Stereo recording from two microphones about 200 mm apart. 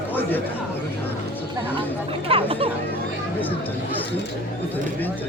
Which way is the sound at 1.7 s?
30° right (ahead or behind).